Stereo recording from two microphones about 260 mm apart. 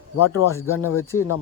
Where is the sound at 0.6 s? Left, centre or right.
Left.